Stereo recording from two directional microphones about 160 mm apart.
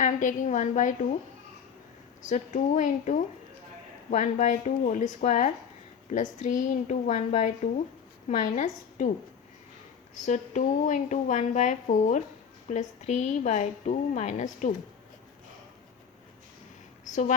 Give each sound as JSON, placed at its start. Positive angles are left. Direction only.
{"t": 0.0, "sound": "speech", "side_deg": 50}
{"t": 2.2, "sound": "speech", "side_deg": 50}
{"t": 10.2, "sound": "speech", "side_deg": 50}
{"t": 17.1, "sound": "a woman's voice", "side_deg": 50}